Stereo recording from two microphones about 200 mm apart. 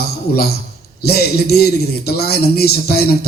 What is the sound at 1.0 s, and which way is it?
A man's voice, 50° left (ahead or behind).